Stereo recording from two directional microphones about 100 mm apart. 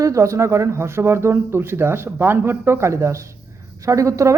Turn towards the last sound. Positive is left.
turn(degrees=-30)  # may be behind; listen again after turning